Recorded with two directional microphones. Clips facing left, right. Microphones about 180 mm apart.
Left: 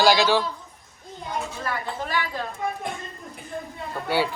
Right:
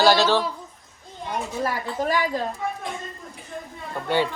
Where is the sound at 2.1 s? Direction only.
40° right (ahead or behind).